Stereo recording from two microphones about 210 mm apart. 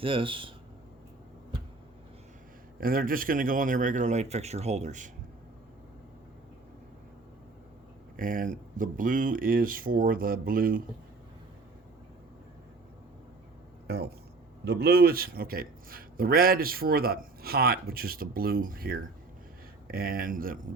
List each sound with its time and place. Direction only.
0.0 s speech: 25° right (ahead or behind)
2.8 s speech: 45° right (ahead or behind)
8.1 s a man's voice: 40° right (ahead or behind)
13.8 s a man's voice: 50° right (ahead or behind)